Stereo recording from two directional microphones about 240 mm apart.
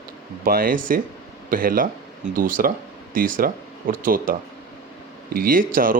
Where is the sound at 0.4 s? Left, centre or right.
Right.